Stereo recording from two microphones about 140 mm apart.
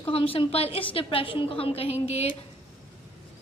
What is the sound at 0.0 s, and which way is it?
A woman's voice, 40° left (ahead or behind).